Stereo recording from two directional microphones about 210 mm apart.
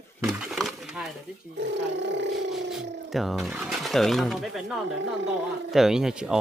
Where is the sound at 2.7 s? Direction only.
Centre (ahead or behind).